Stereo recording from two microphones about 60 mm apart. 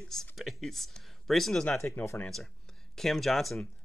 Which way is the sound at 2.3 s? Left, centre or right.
Centre.